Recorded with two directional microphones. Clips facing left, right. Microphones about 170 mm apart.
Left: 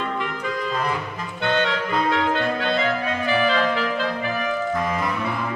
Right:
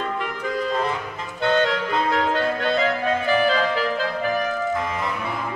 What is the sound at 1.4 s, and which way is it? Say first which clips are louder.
Clarinet: right 2 dB; 40° right (ahead or behind).